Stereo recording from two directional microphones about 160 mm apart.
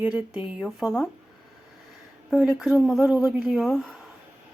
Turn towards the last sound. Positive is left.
turn(degrees=0)  # may be behind; listen again after turning